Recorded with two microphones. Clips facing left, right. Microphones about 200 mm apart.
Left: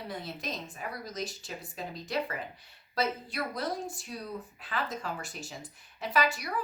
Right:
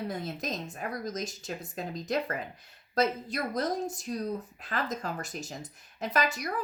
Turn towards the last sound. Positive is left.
turn(degrees=-45)  # may be behind; listen again after turning